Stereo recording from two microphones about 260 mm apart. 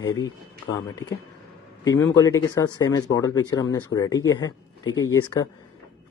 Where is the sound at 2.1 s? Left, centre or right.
Centre.